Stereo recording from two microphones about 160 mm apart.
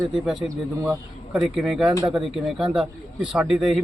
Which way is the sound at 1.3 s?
Centre (ahead or behind).